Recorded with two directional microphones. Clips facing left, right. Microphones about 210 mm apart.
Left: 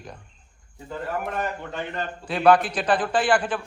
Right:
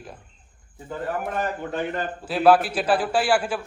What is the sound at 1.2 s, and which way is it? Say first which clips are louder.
A man's voice: right 1 dB; 5° right (ahead or behind).